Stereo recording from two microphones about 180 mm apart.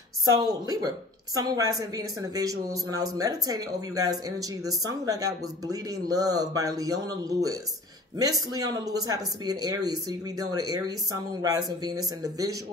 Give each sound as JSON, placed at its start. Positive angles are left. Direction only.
{"t": 0.3, "sound": "a woman's voice", "side_deg": -20}